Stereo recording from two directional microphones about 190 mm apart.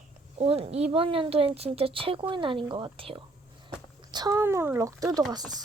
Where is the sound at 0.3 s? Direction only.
30° right (ahead or behind).